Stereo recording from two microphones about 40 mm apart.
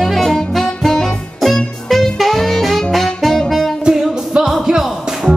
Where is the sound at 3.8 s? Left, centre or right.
Centre.